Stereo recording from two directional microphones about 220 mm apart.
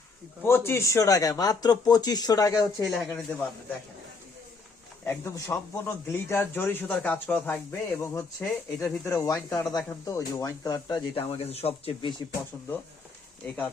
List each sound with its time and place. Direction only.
0.4 s speech: 10° left (ahead or behind)
2.8 s speech: centre (ahead or behind)
5.0 s speech: 10° left (ahead or behind)
13.4 s speech: 5° left (ahead or behind)